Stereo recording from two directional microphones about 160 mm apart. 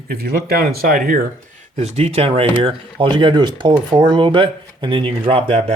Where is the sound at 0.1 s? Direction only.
75° right (ahead or behind).